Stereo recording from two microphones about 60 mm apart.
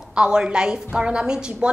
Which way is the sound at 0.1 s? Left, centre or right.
Centre.